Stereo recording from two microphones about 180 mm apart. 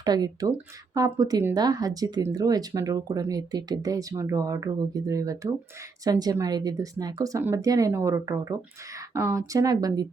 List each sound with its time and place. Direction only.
0.0 s speech: 20° right (ahead or behind)